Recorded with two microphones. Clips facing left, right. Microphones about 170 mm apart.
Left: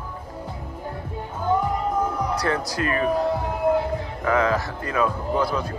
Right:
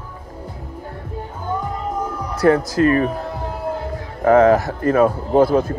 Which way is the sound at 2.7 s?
40° right (ahead or behind).